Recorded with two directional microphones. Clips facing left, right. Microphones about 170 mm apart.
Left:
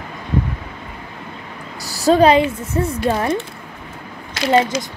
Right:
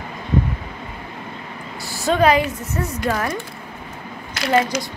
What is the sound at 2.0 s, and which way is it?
A woman's voice, 30° left (ahead or behind).